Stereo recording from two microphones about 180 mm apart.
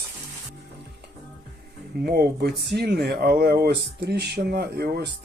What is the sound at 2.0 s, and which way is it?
Speech, 60° right (ahead or behind).